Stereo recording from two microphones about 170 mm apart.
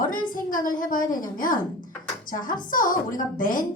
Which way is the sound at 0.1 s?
55° left (ahead or behind).